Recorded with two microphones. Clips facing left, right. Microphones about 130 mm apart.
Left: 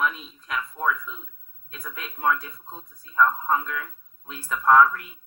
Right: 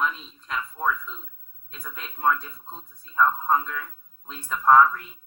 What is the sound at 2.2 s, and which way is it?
A woman's voice, 5° left (ahead or behind).